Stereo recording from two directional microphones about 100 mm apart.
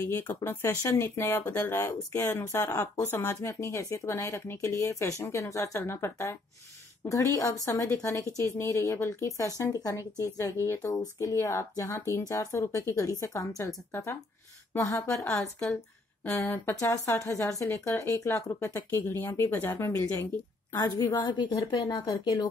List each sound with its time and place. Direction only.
0.0 s a woman's voice: 20° left (ahead or behind)
20.7 s a woman's voice: 40° left (ahead or behind)